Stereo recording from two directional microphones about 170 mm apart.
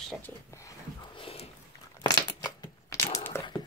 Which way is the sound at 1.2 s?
35° left (ahead or behind).